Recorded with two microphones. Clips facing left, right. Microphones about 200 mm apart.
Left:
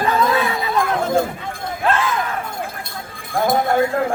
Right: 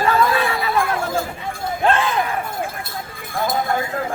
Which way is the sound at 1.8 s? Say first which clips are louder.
Right 1 dB; 30° right (ahead or behind).